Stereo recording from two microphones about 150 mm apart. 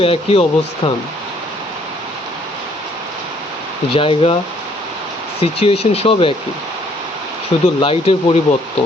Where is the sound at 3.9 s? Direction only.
35° left (ahead or behind).